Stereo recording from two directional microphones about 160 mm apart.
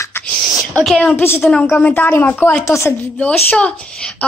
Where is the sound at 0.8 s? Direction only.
5° left (ahead or behind).